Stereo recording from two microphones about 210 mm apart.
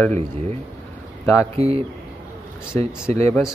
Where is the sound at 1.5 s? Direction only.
30° right (ahead or behind).